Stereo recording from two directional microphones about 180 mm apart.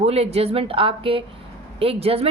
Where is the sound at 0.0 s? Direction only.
35° right (ahead or behind).